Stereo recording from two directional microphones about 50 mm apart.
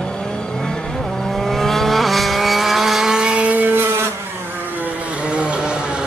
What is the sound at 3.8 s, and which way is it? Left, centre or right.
Vehicle, right.